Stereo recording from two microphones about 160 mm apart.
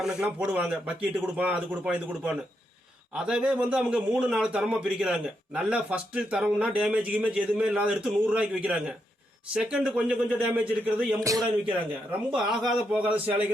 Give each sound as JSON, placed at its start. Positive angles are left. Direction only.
{"t": 0.0, "sound": "a man's voice", "side_deg": -5}
{"t": 11.2, "sound": "speech", "side_deg": -20}
{"t": 12.5, "sound": "a man's voice", "side_deg": 0}